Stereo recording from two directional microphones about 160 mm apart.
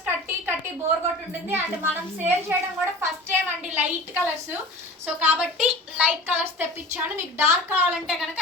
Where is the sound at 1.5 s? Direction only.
10° right (ahead or behind).